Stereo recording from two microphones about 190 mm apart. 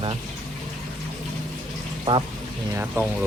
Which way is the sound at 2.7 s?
10° right (ahead or behind).